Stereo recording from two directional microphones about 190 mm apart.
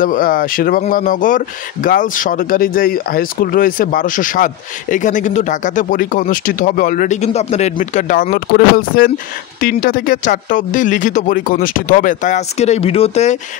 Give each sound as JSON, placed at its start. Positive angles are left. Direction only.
{"t": 0.0, "sound": "speech", "side_deg": 45}